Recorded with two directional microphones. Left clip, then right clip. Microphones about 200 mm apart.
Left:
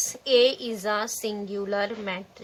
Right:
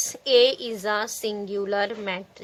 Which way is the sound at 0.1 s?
40° right (ahead or behind).